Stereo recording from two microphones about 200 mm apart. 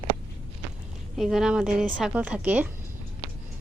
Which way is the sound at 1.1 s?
Centre (ahead or behind).